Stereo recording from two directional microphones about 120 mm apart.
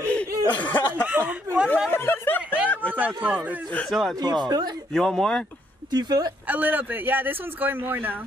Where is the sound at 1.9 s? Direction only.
20° left (ahead or behind).